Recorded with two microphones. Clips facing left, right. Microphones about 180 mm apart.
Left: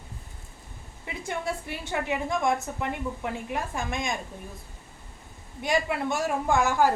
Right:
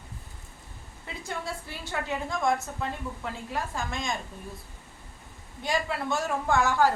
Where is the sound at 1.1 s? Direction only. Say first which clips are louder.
Left 4 dB; 20° left (ahead or behind).